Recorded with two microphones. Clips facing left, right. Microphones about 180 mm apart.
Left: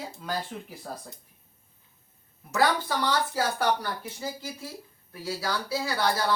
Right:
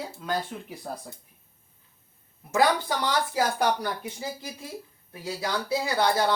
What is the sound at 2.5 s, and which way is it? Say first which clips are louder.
Speech: right 2 dB; 15° right (ahead or behind).